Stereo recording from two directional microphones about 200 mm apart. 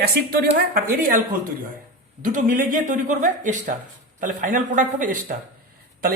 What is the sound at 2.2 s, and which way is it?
A man's voice, 40° right (ahead or behind).